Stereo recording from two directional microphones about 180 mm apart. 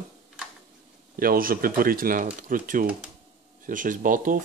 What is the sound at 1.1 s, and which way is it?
Speech, 55° right (ahead or behind).